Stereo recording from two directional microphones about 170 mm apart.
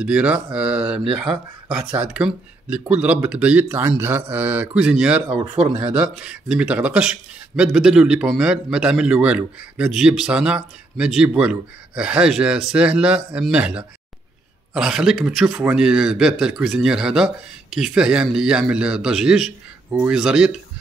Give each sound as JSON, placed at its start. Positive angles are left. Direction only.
{"t": 0.0, "sound": "speech", "side_deg": -5}
{"t": 1.3, "sound": "speech", "side_deg": -30}
{"t": 2.0, "sound": "speech", "side_deg": -5}
{"t": 5.6, "sound": "speech", "side_deg": -30}
{"t": 5.9, "sound": "speech", "side_deg": -5}